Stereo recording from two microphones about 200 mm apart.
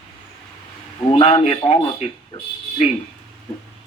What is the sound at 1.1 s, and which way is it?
Speech, 25° left (ahead or behind).